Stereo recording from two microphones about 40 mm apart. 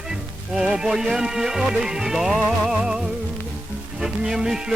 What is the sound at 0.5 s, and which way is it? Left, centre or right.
Music, centre.